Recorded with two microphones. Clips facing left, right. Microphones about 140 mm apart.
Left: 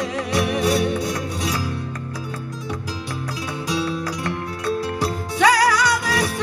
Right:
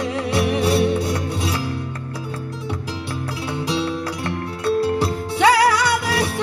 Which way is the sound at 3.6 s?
25° right (ahead or behind).